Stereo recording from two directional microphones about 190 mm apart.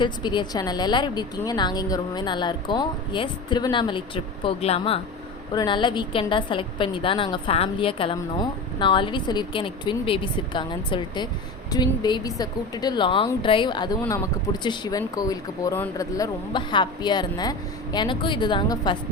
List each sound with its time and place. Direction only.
0.0 s a woman's voice: 25° left (ahead or behind)